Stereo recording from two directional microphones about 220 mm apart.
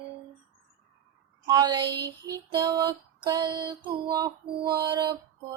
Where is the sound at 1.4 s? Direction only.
20° right (ahead or behind).